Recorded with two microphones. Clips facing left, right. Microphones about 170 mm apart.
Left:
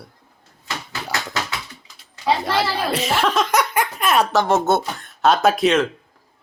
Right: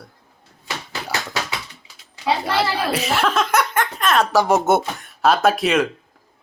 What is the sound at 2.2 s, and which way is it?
Speech, 5° right (ahead or behind).